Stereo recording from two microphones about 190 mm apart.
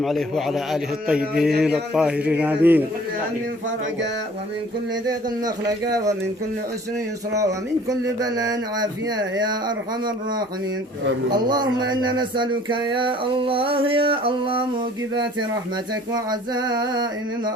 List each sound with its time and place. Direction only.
0.0 s a man's voice: centre (ahead or behind)
5.6 s speech: 20° right (ahead or behind)
7.9 s speech: 20° right (ahead or behind)
11.3 s speech: 20° right (ahead or behind)